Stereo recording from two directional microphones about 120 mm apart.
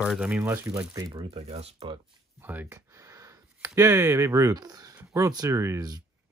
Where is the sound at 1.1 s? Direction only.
55° right (ahead or behind).